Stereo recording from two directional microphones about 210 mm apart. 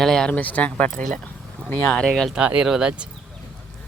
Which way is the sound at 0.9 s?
40° right (ahead or behind).